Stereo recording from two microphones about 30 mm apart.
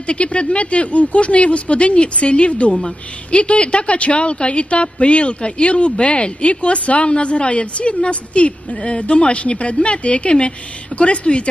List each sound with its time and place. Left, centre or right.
0.1 s a woman's voice: left